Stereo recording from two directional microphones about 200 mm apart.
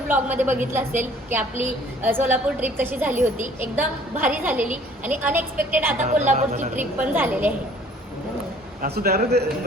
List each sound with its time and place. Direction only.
0.1 s a woman's voice: 10° right (ahead or behind)
6.0 s speech: 35° right (ahead or behind)
6.7 s a woman's voice: 10° right (ahead or behind)
8.8 s a man's voice: 50° right (ahead or behind)